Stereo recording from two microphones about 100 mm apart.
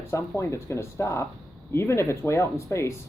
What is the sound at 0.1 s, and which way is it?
Speech, 30° left (ahead or behind).